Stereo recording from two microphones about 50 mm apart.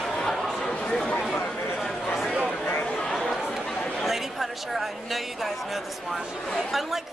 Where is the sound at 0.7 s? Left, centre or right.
Centre.